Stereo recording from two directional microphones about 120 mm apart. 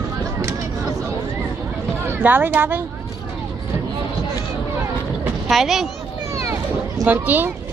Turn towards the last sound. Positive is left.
turn(degrees=-15)  # may be behind; listen again after turning